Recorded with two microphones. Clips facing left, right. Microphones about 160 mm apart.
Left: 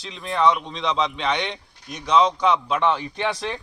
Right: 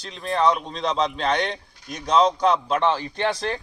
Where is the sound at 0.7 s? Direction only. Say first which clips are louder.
Even; 40° right (ahead or behind).